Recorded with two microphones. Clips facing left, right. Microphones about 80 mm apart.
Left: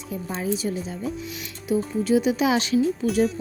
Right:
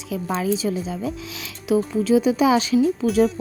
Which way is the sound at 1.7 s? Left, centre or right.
Right.